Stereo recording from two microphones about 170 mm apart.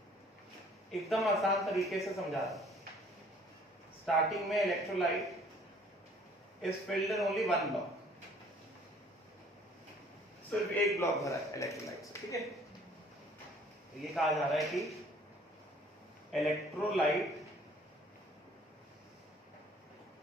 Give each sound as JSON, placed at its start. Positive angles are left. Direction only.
{"t": 0.9, "sound": "a man's voice", "side_deg": 0}
{"t": 4.0, "sound": "a man's voice", "side_deg": 0}
{"t": 6.6, "sound": "a man's voice", "side_deg": 0}
{"t": 11.0, "sound": "speech", "side_deg": 20}
{"t": 14.0, "sound": "a man's voice", "side_deg": 0}
{"t": 16.3, "sound": "a man's voice", "side_deg": 0}